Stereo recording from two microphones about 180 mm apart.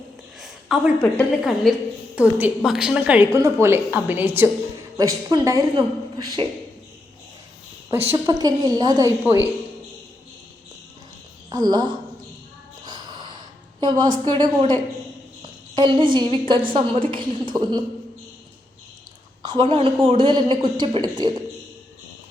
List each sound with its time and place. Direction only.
0.3 s a woman's voice: centre (ahead or behind); by 6.4 s 25° right (ahead or behind)
7.9 s a woman's voice: 15° right (ahead or behind)
11.4 s a woman's voice: 20° right (ahead or behind)
12.8 s gasp: 25° right (ahead or behind)
13.7 s a woman's voice: 20° right (ahead or behind)
19.5 s a woman's voice: 25° right (ahead or behind)